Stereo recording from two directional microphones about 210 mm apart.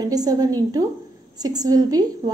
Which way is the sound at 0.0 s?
20° right (ahead or behind).